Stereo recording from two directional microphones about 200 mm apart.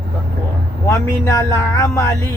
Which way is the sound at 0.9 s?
15° left (ahead or behind).